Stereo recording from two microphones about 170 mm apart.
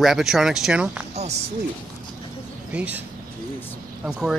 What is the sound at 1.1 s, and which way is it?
Speech, 40° right (ahead or behind).